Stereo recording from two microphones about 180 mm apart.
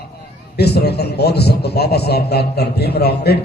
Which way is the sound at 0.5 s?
65° left (ahead or behind).